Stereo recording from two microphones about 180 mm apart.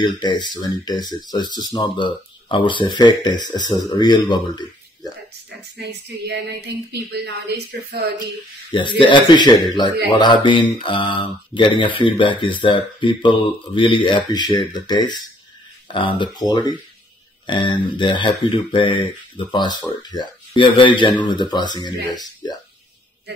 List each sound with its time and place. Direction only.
0.0 s speech: 25° left (ahead or behind)
5.8 s speech: 70° right (ahead or behind)
8.7 s speech: 25° left (ahead or behind)